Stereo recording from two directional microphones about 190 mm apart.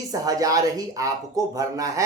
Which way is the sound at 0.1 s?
20° right (ahead or behind).